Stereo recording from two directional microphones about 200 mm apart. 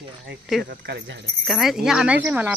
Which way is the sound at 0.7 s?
60° right (ahead or behind).